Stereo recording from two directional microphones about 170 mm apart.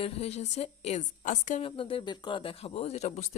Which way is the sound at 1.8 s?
30° left (ahead or behind).